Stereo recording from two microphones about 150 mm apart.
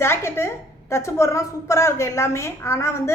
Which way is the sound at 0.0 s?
15° left (ahead or behind).